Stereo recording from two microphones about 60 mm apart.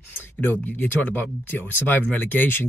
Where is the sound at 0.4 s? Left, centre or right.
Left.